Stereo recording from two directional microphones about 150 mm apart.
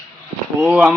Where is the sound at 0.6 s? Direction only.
5° right (ahead or behind).